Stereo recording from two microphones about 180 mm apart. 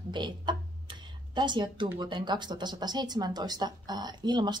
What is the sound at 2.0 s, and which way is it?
Speech, 25° right (ahead or behind).